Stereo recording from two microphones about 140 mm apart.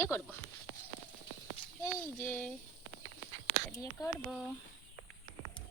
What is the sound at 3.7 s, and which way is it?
Speech, 25° left (ahead or behind).